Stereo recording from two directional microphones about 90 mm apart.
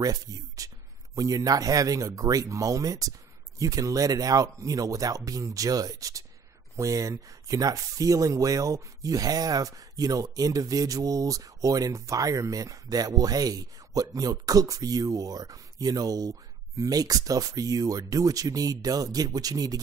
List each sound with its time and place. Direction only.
0.0 s speech: 40° right (ahead or behind)